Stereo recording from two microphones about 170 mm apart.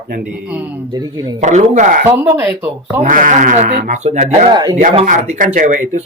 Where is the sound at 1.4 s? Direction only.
45° right (ahead or behind).